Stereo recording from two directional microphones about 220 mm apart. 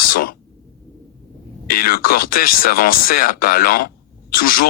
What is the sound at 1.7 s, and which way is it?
A man's voice, 40° left (ahead or behind).